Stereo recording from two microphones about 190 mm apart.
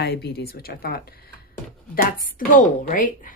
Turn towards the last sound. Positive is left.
turn(degrees=45)  # may be behind; listen again after turning